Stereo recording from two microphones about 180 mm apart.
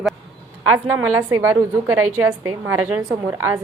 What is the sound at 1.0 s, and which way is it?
A woman's voice, 15° right (ahead or behind).